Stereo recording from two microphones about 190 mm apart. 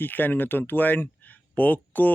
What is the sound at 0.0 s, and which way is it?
Speech, 10° left (ahead or behind).